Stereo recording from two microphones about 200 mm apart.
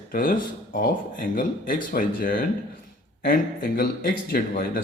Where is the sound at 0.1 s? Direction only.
45° left (ahead or behind).